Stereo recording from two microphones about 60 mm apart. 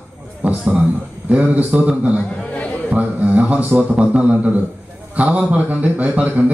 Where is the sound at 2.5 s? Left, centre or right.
Left.